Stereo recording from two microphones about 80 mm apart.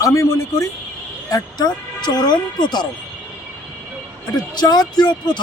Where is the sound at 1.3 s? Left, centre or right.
Left.